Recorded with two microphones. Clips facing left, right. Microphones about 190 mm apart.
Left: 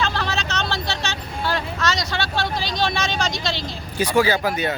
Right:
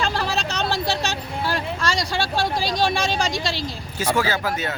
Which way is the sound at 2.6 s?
35° right (ahead or behind).